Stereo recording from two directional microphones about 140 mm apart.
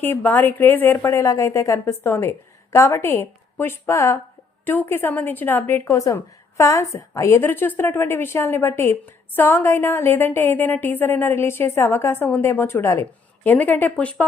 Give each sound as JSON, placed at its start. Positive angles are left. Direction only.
{"t": 0.0, "sound": "a woman's voice", "side_deg": 15}